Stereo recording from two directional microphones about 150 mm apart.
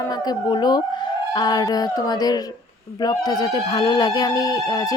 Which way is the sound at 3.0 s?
25° left (ahead or behind).